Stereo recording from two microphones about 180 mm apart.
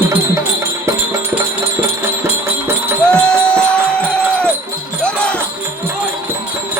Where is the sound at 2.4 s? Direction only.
15° right (ahead or behind).